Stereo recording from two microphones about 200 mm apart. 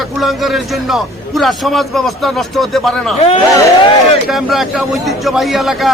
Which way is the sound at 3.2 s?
30° left (ahead or behind).